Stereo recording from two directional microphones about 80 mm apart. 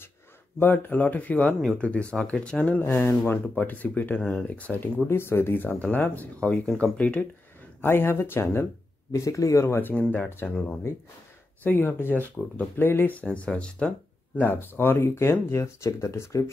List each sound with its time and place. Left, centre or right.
0.6 s speech: left
1.4 s speech: centre
1.8 s speech: centre
7.8 s speech: left
9.1 s speech: left
9.8 s speech: left
10.0 s speech: centre
10.9 s speech: left; by 14.4 s centre
14.4 s speech: left